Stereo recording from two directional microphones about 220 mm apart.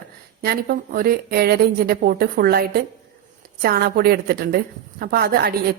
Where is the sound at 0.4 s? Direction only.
40° right (ahead or behind).